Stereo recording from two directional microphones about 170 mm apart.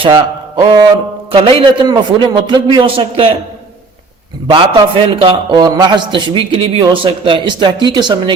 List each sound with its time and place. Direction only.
0.0 s a sound: 30° right (ahead or behind)
1.3 s a man's voice: 30° right (ahead or behind)
4.4 s a man's voice: 25° right (ahead or behind)